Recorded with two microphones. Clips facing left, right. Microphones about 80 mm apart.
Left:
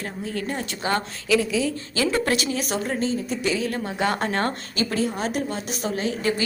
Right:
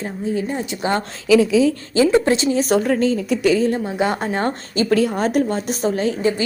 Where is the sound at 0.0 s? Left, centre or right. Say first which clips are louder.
Right 6 dB; centre; by 2.7 s right.